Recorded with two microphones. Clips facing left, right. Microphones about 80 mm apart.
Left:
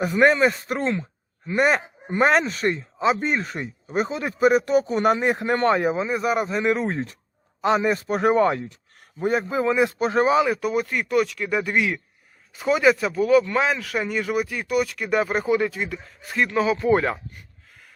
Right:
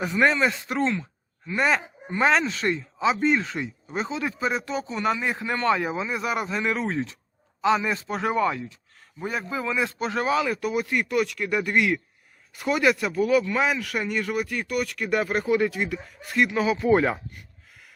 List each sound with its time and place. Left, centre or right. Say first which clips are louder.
0.0 s speech: left 4 dB; left
3.1 s speech: even; left
4.5 s speech: left 9 dB; left
4.9 s speech: left 6 dB; left
5.5 s speech: left 1 dB; left
9.1 s speech: left 7 dB; left
9.7 s speech: left 5 dB; left
10.4 s speech: left 3 dB; centre